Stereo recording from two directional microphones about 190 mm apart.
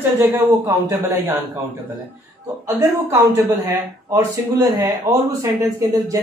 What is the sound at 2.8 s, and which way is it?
A man's voice, 15° right (ahead or behind).